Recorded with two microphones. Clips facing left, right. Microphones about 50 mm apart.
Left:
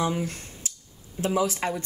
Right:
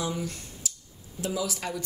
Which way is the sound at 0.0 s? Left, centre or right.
Left.